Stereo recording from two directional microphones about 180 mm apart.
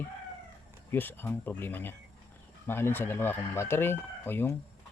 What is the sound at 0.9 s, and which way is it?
A man's voice, 10° left (ahead or behind).